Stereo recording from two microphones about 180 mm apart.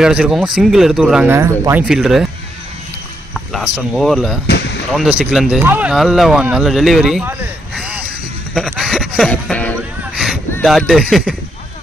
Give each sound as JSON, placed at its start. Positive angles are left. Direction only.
{"t": 0.0, "sound": "speech", "side_deg": -5}
{"t": 3.3, "sound": "speech", "side_deg": 0}
{"t": 8.7, "sound": "a sound", "side_deg": 0}
{"t": 10.6, "sound": "speech", "side_deg": 0}